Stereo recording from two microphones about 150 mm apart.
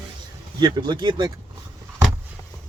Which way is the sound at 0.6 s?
30° right (ahead or behind).